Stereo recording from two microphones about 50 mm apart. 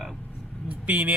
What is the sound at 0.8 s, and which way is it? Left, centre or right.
Speech, right.